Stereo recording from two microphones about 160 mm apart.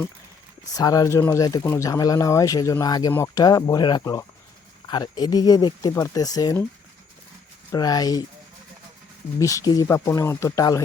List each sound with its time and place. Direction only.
0.8 s speech: 20° left (ahead or behind)
7.7 s speech: 25° left (ahead or behind)
9.4 s speech: 20° left (ahead or behind)